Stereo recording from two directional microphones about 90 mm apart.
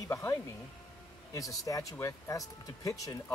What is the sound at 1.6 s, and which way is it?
Speech, 40° left (ahead or behind).